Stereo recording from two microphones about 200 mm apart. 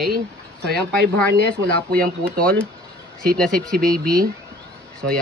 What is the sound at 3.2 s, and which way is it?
Speech, 45° right (ahead or behind).